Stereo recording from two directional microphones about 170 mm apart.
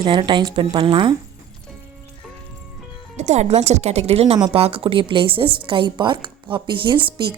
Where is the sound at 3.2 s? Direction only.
40° right (ahead or behind).